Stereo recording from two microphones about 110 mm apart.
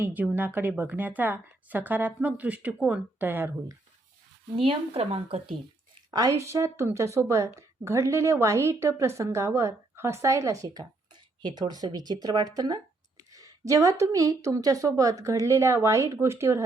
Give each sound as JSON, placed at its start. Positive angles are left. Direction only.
{"t": 0.0, "sound": "speech", "side_deg": -15}
{"t": 4.5, "sound": "speech", "side_deg": -55}
{"t": 6.1, "sound": "a woman's voice", "side_deg": -30}